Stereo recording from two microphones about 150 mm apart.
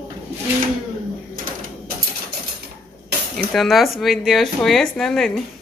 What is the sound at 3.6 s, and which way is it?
A woman's voice, centre (ahead or behind).